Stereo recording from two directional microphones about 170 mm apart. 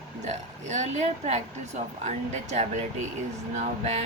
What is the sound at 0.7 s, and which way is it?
Speech, 40° right (ahead or behind).